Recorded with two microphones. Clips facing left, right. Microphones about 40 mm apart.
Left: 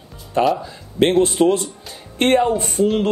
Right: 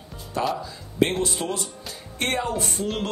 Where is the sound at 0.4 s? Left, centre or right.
Left.